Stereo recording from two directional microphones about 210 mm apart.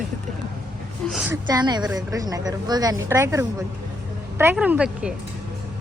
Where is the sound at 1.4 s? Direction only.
20° right (ahead or behind).